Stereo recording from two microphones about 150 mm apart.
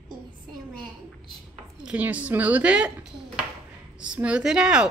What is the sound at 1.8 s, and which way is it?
Speech, 10° right (ahead or behind).